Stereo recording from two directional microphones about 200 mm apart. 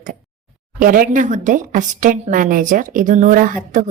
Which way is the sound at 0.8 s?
40° right (ahead or behind).